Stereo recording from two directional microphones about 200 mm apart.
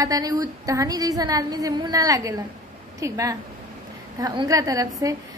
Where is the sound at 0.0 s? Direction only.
20° right (ahead or behind).